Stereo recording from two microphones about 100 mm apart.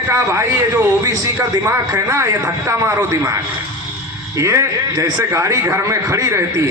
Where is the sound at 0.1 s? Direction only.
30° right (ahead or behind).